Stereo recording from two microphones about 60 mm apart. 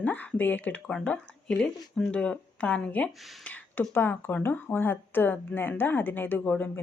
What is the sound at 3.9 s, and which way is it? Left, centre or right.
Speech, left.